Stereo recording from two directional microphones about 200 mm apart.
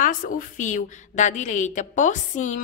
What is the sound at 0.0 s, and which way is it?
A woman's voice, 40° left (ahead or behind).